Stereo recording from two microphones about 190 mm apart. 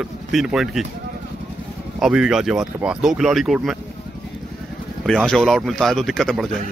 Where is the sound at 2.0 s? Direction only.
5° right (ahead or behind).